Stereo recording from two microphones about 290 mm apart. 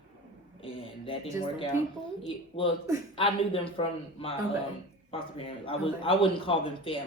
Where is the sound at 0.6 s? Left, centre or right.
Centre.